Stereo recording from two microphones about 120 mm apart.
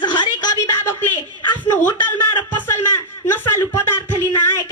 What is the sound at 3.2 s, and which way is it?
Speech, 20° left (ahead or behind).